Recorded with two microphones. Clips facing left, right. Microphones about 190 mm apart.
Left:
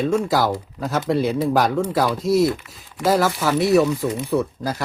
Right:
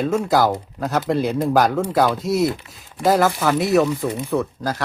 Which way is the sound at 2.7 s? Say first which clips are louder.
Even; centre (ahead or behind).